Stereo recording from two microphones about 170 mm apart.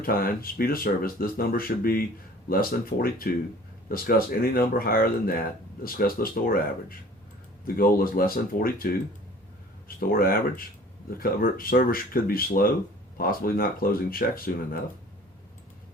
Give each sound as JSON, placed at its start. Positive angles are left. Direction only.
{"t": 0.0, "sound": "speech", "side_deg": 60}
{"t": 10.1, "sound": "speech", "side_deg": 60}